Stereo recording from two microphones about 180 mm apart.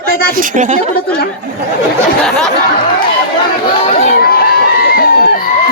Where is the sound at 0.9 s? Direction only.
55° left (ahead or behind).